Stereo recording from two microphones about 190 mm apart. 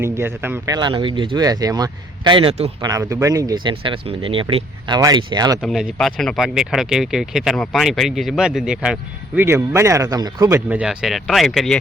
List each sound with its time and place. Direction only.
0.0 s speech: 10° right (ahead or behind); by 2.9 s 30° right (ahead or behind)
2.9 s speech: 15° right (ahead or behind)
5.6 s speech: centre (ahead or behind); by 10.6 s 20° right (ahead or behind)
10.7 s speech: 5° right (ahead or behind)